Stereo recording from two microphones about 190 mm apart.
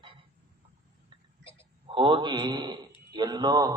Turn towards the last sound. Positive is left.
turn(degrees=-20)  # may be behind; listen again after turning